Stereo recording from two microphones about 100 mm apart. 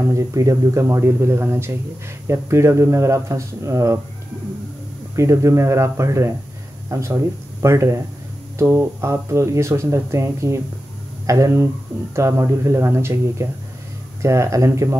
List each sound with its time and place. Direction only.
0.1 s speech: 35° right (ahead or behind)
5.1 s speech: 30° right (ahead or behind)